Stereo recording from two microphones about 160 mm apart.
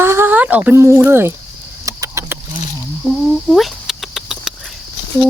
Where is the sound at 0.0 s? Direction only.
15° right (ahead or behind).